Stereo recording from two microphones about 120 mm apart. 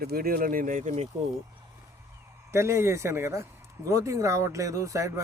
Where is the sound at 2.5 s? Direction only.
20° right (ahead or behind).